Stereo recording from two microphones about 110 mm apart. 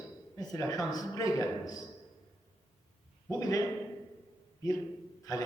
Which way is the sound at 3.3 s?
30° left (ahead or behind).